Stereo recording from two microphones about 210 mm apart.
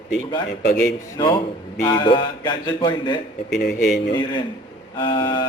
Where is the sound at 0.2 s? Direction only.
20° left (ahead or behind).